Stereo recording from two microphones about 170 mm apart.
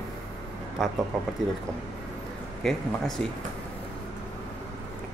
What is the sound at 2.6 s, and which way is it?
Speech, 5° left (ahead or behind).